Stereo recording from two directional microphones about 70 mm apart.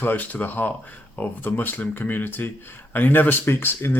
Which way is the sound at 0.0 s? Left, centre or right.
Left.